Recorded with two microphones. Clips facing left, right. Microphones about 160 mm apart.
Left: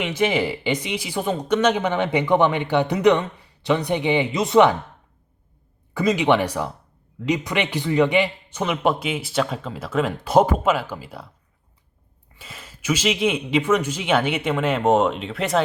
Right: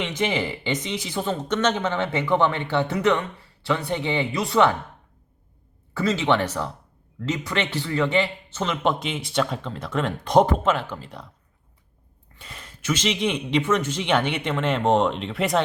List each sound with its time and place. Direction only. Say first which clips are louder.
0.0 s speech: left 4 dB; 10° left (ahead or behind)
5.9 s speech: left 3 dB; 15° left (ahead or behind)
12.4 s speech: left 1 dB; 5° left (ahead or behind)